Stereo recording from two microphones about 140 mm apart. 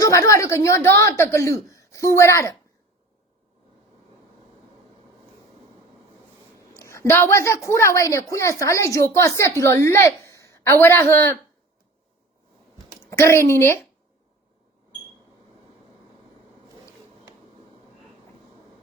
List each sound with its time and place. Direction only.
0.0 s a woman's voice: 25° left (ahead or behind)
6.7 s a woman's voice: 20° left (ahead or behind)
13.1 s a woman's voice: 20° left (ahead or behind)